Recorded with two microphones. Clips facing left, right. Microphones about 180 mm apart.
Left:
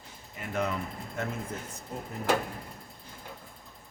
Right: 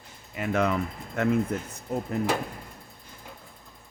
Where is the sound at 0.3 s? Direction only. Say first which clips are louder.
Right 6 dB; 85° right.